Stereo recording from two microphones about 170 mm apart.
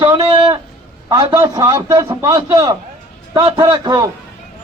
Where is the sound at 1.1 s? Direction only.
20° right (ahead or behind).